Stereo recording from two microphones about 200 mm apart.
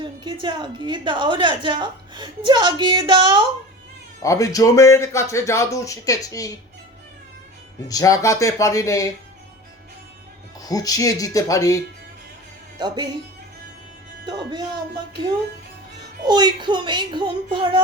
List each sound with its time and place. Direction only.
0.0 s a woman's voice: 25° right (ahead or behind)
4.2 s speech: 15° left (ahead or behind)
7.9 s speech: 20° left (ahead or behind)
10.6 s speech: 20° left (ahead or behind)
12.8 s a woman's voice: 20° right (ahead or behind)
14.3 s a woman's voice: 25° right (ahead or behind)